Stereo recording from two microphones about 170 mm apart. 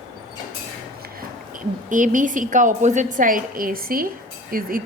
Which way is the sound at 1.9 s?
50° right (ahead or behind).